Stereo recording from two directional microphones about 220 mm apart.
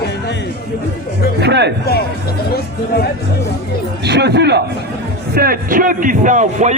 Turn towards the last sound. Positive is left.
turn(degrees=-35)  # may be behind; listen again after turning